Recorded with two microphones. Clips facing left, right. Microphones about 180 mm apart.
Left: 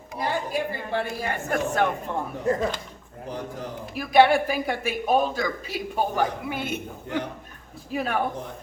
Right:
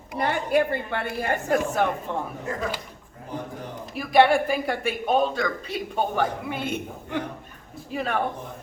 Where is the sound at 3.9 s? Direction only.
Centre (ahead or behind).